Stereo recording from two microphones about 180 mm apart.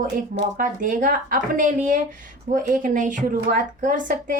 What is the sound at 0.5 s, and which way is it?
A woman's voice, 50° right (ahead or behind).